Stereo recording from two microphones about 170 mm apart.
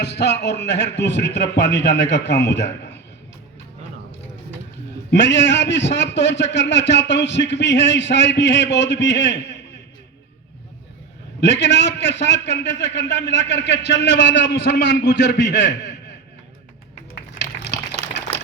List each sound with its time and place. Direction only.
0.0 s a man's voice: 90° left
5.1 s a man's voice: 90° left
11.3 s a man's voice: 90° left
14.3 s a man's voice: 75° left (ahead or behind); by 15.8 s 90° left
17.4 s a sound: 90° left